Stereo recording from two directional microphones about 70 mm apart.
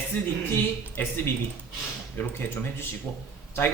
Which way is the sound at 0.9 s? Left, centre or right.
Left.